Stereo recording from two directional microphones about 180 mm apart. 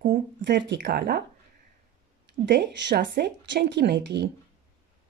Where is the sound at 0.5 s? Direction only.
70° right (ahead or behind).